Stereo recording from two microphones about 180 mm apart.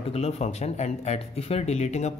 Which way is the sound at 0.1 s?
35° left (ahead or behind).